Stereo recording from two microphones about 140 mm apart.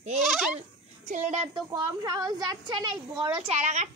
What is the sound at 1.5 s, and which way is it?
A woman's voice, 25° right (ahead or behind).